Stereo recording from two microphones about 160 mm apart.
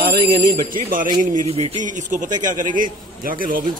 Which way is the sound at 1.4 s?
40° right (ahead or behind).